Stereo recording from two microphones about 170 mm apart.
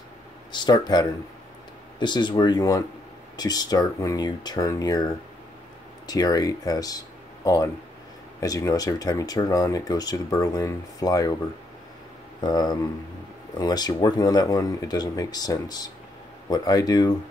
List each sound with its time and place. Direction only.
0.5 s speech: 25° left (ahead or behind)
6.0 s speech: 20° left (ahead or behind)
12.4 s speech: 25° left (ahead or behind)